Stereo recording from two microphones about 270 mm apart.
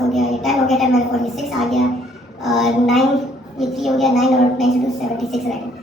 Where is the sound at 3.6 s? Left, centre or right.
Centre.